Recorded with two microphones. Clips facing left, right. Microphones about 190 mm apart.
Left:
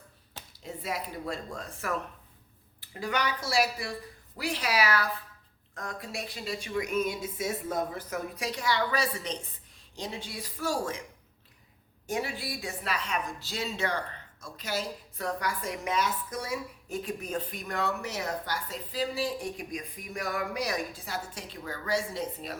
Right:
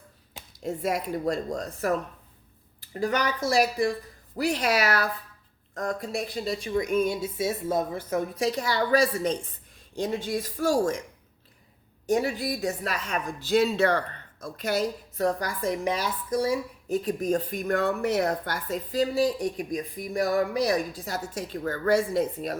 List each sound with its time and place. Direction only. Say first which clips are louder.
0.6 s speech: right 8 dB; 50° right (ahead or behind)
12.0 s speech: right 8 dB; 40° right (ahead or behind)
15.2 s speech: right 7 dB; 35° right (ahead or behind)